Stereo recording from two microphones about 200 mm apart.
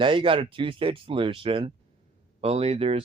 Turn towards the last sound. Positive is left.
turn(degrees=-30)  # may be behind; listen again after turning